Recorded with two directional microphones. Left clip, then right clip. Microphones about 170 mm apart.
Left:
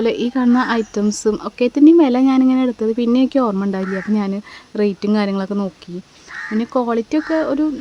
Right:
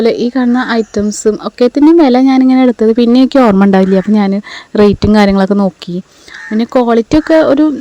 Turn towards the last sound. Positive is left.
turn(degrees=-40)  # may be behind; listen again after turning